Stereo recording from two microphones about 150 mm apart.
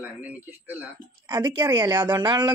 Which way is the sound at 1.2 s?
30° right (ahead or behind).